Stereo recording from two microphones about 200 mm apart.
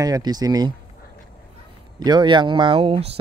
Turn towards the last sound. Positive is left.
turn(degrees=-30)  # may be behind; listen again after turning